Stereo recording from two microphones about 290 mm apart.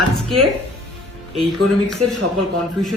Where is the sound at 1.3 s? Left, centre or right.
Centre.